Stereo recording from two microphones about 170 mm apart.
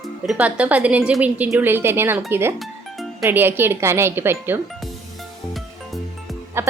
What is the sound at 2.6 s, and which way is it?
Music, centre (ahead or behind).